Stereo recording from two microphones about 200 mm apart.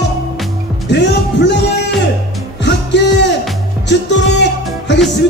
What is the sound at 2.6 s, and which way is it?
Music, 60° left (ahead or behind).